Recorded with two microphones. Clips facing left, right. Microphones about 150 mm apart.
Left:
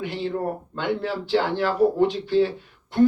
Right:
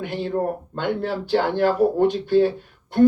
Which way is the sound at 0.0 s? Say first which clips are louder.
Right 2 dB; 50° right (ahead or behind).